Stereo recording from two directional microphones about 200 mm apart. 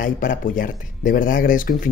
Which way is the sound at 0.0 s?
45° left (ahead or behind).